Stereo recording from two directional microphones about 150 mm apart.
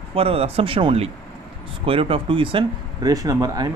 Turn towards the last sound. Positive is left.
turn(degrees=-25)  # may be behind; listen again after turning